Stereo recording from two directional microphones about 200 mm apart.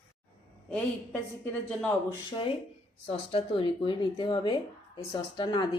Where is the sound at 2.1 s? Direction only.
25° left (ahead or behind).